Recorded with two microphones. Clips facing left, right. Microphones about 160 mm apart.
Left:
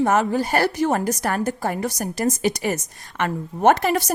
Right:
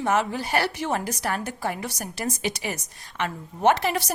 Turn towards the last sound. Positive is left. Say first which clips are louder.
# left 4 dB
turn(degrees=45)  # may be behind; listen again after turning